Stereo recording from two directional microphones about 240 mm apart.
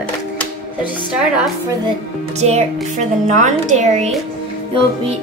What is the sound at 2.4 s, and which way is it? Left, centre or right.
Music, right.